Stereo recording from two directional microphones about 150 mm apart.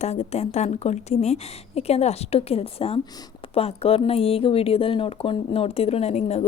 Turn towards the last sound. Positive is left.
turn(degrees=45)  # may be behind; listen again after turning